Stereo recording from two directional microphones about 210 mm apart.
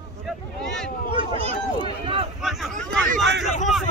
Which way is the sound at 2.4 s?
Centre (ahead or behind).